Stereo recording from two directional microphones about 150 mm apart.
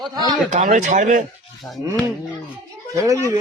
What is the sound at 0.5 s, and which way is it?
Speech, 60° right (ahead or behind).